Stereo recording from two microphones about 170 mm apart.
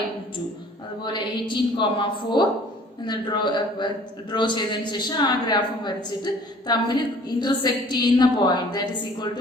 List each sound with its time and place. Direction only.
1.0 s a man's voice: 25° left (ahead or behind)